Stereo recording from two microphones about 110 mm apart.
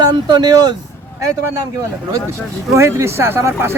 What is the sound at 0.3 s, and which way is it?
Speech, 40° right (ahead or behind).